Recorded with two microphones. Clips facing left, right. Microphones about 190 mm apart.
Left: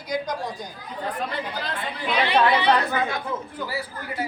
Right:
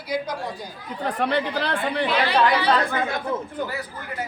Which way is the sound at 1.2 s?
70° right (ahead or behind).